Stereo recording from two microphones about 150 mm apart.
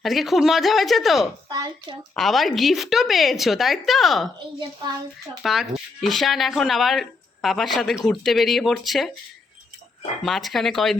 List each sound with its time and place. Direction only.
0.0 s speech: centre (ahead or behind)
1.5 s a woman's voice: 25° right (ahead or behind)
2.1 s speech: centre (ahead or behind)
5.4 s speech: centre (ahead or behind)
10.2 s speech: centre (ahead or behind)